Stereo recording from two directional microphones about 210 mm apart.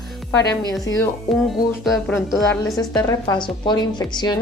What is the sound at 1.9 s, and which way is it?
Speech, centre (ahead or behind).